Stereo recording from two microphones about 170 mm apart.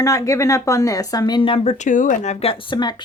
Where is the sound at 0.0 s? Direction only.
20° left (ahead or behind).